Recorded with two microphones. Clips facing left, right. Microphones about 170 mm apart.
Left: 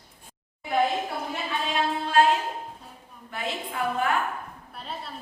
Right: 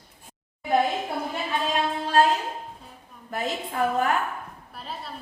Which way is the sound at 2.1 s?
40° right (ahead or behind).